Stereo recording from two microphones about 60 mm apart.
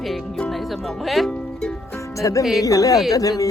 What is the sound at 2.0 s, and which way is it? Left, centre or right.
Music, left.